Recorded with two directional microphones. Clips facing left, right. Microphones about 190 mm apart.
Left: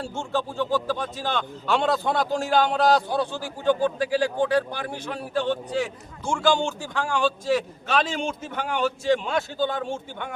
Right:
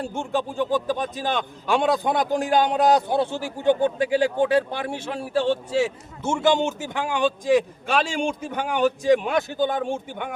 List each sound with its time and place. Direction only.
0.0 s a man's voice: 15° right (ahead or behind)